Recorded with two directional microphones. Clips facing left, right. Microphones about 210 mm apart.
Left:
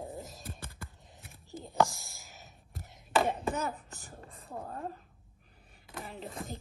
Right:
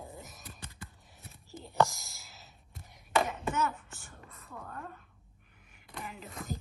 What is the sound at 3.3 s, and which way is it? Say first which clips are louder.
Chop: left 1 dB; 35° left (ahead or behind).